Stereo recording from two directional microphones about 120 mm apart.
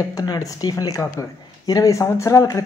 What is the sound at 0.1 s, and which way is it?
Speech, 30° left (ahead or behind).